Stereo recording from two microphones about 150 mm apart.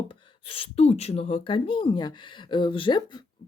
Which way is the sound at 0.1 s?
35° left (ahead or behind).